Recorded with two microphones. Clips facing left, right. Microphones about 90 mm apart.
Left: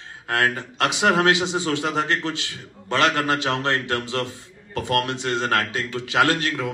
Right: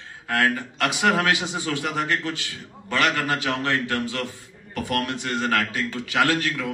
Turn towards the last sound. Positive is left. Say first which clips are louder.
# left 2 dB
turn(degrees=25)  # may be behind; listen again after turning